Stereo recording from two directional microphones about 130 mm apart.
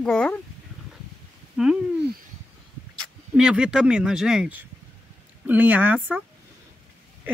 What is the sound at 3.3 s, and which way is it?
Speech, 5° right (ahead or behind).